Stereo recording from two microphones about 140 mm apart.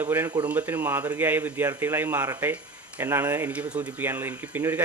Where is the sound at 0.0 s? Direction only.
15° right (ahead or behind).